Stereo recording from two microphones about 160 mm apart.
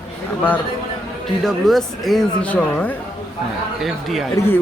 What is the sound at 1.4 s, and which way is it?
Speech, centre (ahead or behind).